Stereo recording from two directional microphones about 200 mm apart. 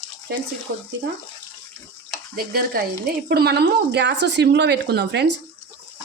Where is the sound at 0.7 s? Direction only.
60° right (ahead or behind).